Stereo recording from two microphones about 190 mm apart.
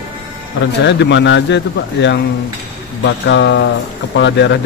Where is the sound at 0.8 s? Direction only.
65° left (ahead or behind).